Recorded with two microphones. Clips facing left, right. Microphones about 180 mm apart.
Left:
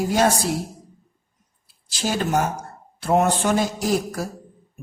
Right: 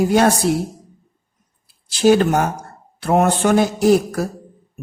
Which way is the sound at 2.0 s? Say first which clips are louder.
Right 8 dB; 60° right (ahead or behind).